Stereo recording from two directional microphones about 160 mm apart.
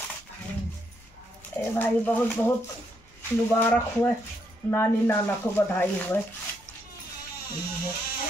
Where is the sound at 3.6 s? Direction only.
15° left (ahead or behind).